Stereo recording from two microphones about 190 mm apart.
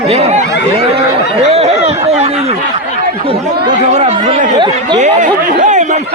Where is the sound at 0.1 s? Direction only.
35° right (ahead or behind).